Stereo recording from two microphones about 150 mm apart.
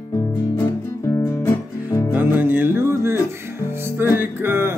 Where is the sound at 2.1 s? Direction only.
15° right (ahead or behind).